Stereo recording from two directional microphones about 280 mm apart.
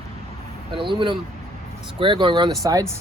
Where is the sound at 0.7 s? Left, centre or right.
Centre.